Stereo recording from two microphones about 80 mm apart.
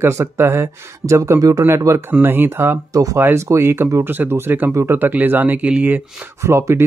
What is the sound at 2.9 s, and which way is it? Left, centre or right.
Speech, right.